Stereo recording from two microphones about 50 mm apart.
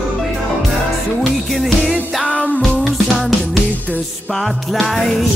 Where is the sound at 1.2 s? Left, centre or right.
Centre.